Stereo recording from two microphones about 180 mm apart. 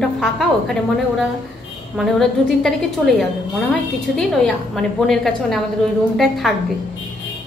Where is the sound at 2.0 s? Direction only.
Centre (ahead or behind).